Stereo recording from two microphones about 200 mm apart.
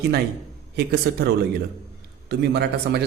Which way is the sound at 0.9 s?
50° right (ahead or behind).